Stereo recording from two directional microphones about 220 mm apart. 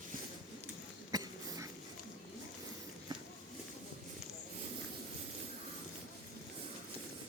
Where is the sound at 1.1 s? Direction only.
15° right (ahead or behind).